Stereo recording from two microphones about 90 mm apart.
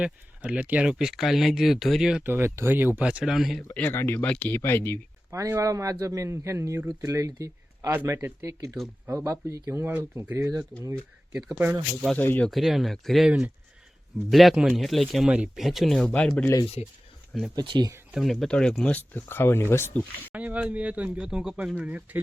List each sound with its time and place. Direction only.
0.0 s speech: 15° right (ahead or behind)
2.2 s speech: 25° right (ahead or behind); by 3.6 s 5° right (ahead or behind)
3.7 s speech: 25° left (ahead or behind)
5.3 s a man's voice: 35° right (ahead or behind)
12.1 s speech: 20° left (ahead or behind)
12.5 s speech: centre (ahead or behind)
17.5 s speech: 55° right (ahead or behind)
18.1 s speech: centre (ahead or behind); by 19.9 s 25° left (ahead or behind)
20.3 s speech: 15° right (ahead or behind)